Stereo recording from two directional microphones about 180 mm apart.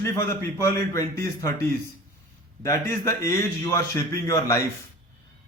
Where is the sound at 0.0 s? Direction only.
15° left (ahead or behind).